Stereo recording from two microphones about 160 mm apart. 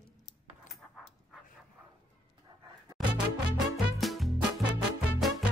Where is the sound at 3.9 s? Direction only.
Centre (ahead or behind).